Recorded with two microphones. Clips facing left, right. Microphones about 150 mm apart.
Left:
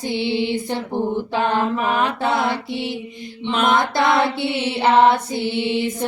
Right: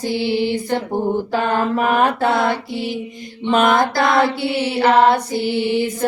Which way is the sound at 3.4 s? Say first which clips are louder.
Right 6 dB; 50° right (ahead or behind).